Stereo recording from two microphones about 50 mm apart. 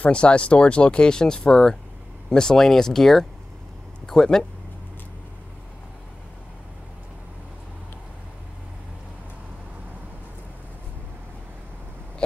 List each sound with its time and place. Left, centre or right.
0.1 s speech: left